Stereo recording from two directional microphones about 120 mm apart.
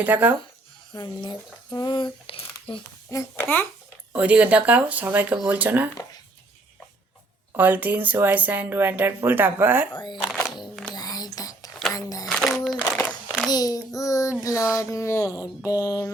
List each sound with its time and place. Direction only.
0.0 s speech: 15° right (ahead or behind)
0.9 s speech: 35° left (ahead or behind)
3.1 s a child's voice: 20° left (ahead or behind)
4.1 s speech: 10° right (ahead or behind)
7.5 s speech: 15° right (ahead or behind)
9.9 s speech: 40° left (ahead or behind)
10.9 s whispering: 35° left (ahead or behind)
11.9 s speech: 30° left (ahead or behind)
12.3 s a sound: 5° left (ahead or behind)
13.5 s speech: 30° left (ahead or behind)